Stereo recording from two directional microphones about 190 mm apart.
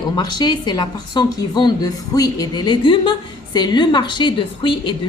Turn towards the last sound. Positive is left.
turn(degrees=25)  # may be behind; listen again after turning